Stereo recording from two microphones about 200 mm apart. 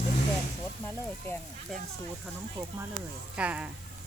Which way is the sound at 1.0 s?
10° left (ahead or behind).